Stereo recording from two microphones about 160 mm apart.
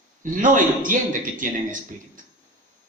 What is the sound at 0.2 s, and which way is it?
Speech, 55° right (ahead or behind).